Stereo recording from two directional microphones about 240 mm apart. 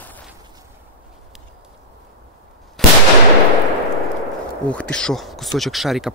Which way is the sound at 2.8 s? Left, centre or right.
Centre.